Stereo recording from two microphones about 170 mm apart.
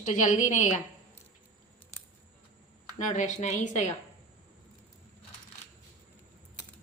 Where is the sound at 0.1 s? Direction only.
45° left (ahead or behind).